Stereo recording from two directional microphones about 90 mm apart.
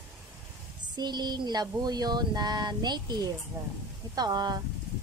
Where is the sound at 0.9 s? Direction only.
55° right (ahead or behind).